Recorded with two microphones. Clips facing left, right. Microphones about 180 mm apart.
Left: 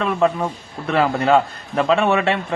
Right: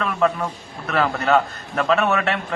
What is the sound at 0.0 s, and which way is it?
A man's voice, 25° left (ahead or behind).